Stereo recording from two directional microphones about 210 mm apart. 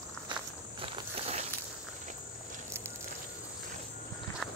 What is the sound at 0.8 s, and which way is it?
Walk, 30° right (ahead or behind).